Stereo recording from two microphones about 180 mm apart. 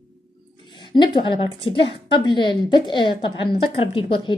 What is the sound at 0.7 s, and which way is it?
A woman's voice, 25° left (ahead or behind).